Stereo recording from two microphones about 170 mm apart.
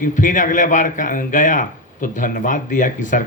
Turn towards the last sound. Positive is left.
turn(degrees=50)  # may be behind; listen again after turning